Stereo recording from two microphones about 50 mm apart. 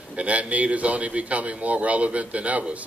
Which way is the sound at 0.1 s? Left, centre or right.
Right.